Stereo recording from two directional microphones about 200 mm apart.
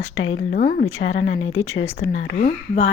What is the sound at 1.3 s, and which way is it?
Speech, 85° left.